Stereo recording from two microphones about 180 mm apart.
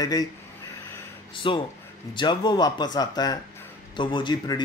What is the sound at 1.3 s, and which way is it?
A man's voice, 30° left (ahead or behind).